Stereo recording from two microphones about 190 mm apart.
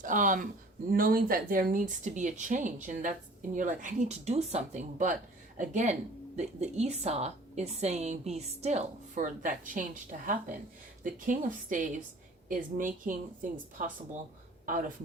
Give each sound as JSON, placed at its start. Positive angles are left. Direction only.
{"t": 0.0, "sound": "speech", "side_deg": -45}